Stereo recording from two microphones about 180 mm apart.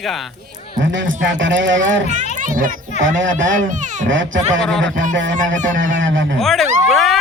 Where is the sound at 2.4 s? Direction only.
45° right (ahead or behind).